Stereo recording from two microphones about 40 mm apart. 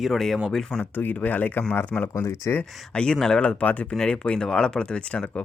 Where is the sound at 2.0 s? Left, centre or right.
Left.